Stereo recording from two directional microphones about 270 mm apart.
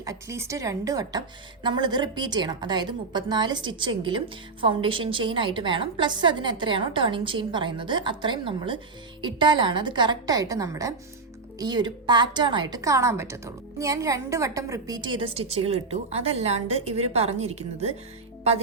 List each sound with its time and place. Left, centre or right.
0.0 s a woman's voice: centre